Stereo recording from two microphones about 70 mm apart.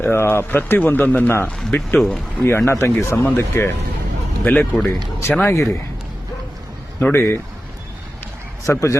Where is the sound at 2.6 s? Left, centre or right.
Left.